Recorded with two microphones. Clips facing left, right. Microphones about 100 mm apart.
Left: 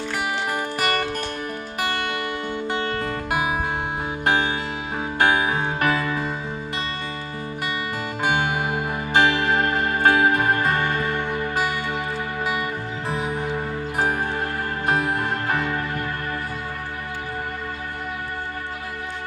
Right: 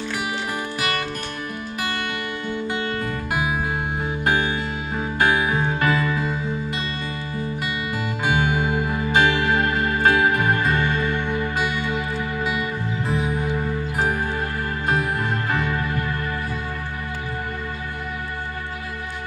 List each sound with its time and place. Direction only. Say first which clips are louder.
0.5 s music: left 2 dB; 50° left (ahead or behind)
3.3 s music: left 1 dB; 65° left (ahead or behind); by 6.3 s 50° left (ahead or behind)
8.2 s music: right 1 dB; 55° left (ahead or behind)
15.5 s music: right 1 dB; 45° left (ahead or behind)